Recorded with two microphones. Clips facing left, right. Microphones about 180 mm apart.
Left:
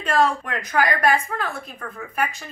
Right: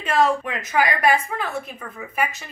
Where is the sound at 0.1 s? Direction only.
5° right (ahead or behind).